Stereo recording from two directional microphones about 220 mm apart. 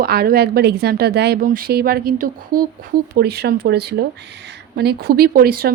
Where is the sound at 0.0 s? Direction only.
45° right (ahead or behind).